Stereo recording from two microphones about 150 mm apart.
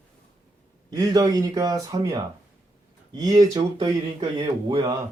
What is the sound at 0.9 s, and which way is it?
Speech, 25° right (ahead or behind).